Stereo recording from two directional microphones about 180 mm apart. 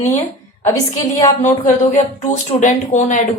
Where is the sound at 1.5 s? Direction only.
40° left (ahead or behind).